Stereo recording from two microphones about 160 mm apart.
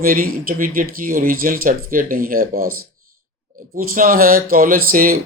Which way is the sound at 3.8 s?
60° right (ahead or behind).